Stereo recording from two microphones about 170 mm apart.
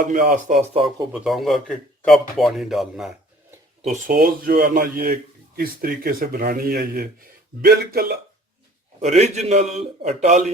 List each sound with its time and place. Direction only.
0.0 s speech: 50° right (ahead or behind)
1.1 s speech: centre (ahead or behind)
4.0 s speech: 55° right (ahead or behind)
9.0 s a man's voice: 40° right (ahead or behind)